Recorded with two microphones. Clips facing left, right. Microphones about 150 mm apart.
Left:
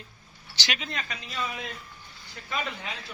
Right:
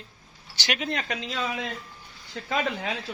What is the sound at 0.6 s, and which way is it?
Speech, 55° right (ahead or behind).